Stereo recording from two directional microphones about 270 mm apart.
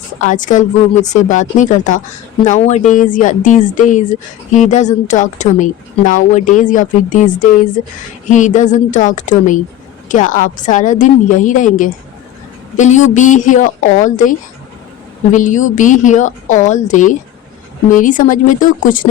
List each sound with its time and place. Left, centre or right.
0.2 s speech: left